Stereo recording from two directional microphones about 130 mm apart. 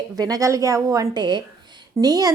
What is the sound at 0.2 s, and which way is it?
A woman's voice, 25° right (ahead or behind).